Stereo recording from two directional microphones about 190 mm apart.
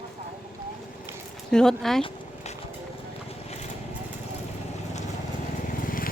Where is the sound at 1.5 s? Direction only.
5° left (ahead or behind).